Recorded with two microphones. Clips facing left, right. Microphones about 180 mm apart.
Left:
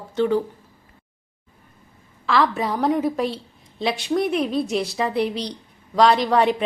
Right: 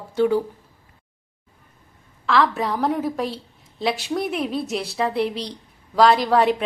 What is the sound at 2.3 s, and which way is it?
A woman's voice, centre (ahead or behind).